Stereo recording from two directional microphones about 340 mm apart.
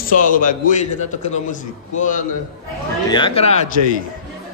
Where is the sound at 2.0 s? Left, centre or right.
Left.